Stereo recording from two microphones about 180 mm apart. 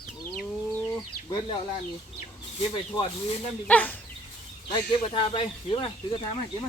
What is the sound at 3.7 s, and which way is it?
Speech, 10° left (ahead or behind).